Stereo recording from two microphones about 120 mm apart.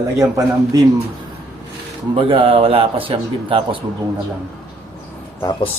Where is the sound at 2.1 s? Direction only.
50° right (ahead or behind).